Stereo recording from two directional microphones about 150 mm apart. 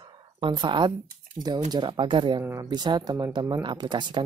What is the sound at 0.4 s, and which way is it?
Speech, 30° right (ahead or behind).